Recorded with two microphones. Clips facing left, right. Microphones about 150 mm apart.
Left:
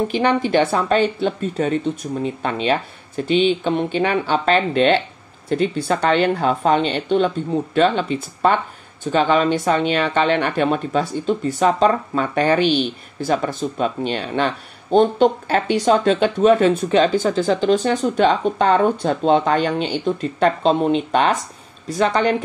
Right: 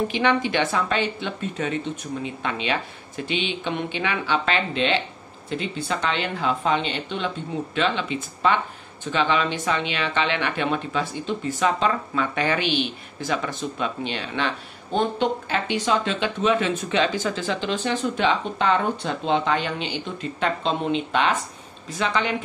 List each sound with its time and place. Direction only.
0.1 s speech: 40° left (ahead or behind)